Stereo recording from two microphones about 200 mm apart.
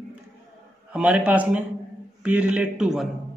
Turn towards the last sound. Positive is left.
turn(degrees=-5)  # may be behind; listen again after turning